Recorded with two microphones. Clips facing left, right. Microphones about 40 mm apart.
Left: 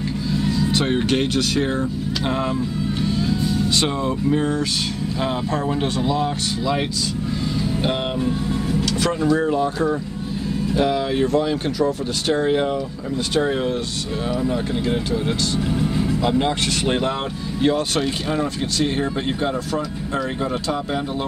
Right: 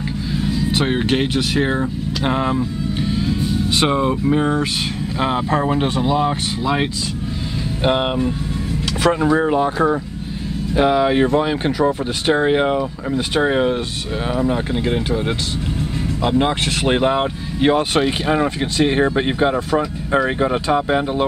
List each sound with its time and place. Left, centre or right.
0.3 s speech: centre
3.0 s vehicle: centre
5.2 s speech: right
7.8 s speech: right
16.0 s speech: centre; by 21.3 s right